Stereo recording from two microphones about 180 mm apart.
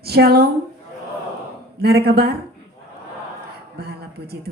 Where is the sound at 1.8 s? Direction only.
65° right (ahead or behind).